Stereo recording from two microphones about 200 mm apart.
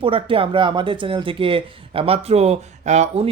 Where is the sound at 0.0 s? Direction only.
25° right (ahead or behind).